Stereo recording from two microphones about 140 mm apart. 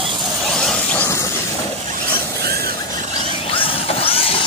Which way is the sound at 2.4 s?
90° right.